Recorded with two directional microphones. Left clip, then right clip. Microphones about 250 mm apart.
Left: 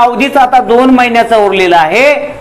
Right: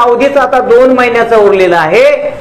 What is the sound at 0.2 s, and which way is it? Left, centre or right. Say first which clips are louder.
A man's voice: left 1 dB; left.